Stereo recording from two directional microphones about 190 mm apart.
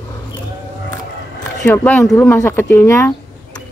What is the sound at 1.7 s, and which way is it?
Speech, 5° left (ahead or behind).